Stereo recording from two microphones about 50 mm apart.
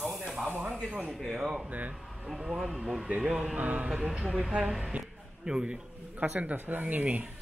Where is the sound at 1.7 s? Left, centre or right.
Right.